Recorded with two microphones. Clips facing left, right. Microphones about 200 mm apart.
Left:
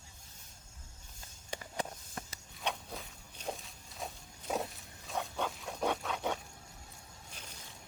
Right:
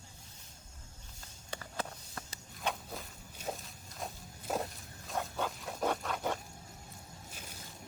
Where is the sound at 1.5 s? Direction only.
15° left (ahead or behind).